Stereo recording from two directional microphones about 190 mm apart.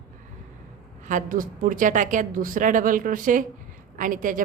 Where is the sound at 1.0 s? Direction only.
45° right (ahead or behind).